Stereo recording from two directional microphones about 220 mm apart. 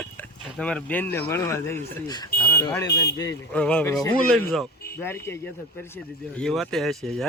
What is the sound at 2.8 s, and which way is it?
Speech, 50° left (ahead or behind).